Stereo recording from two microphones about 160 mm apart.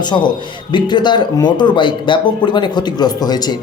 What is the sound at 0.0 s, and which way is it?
Speech, 25° left (ahead or behind).